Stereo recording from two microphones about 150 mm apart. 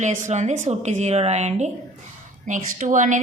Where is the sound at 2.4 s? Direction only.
60° right (ahead or behind).